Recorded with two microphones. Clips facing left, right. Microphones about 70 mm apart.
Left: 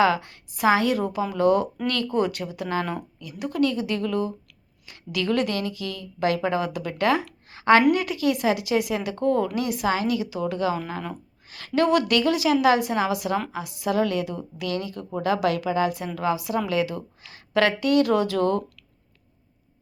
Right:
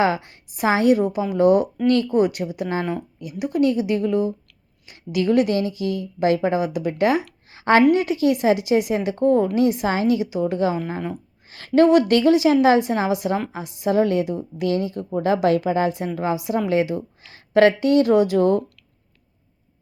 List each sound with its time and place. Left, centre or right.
0.0 s a woman's voice: right
7.5 s a woman's voice: right